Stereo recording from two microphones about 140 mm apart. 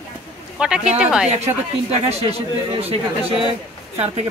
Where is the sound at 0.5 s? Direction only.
5° right (ahead or behind).